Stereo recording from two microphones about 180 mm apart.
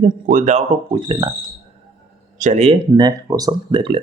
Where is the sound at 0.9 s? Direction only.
25° right (ahead or behind).